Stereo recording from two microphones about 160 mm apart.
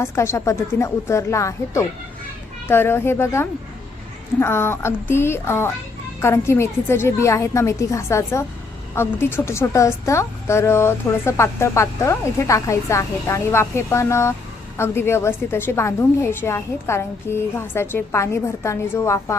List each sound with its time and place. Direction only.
0.0 s a woman's voice: 15° left (ahead or behind)